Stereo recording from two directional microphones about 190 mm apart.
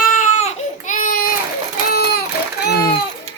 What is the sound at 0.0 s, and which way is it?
Baby cry, 40° left (ahead or behind).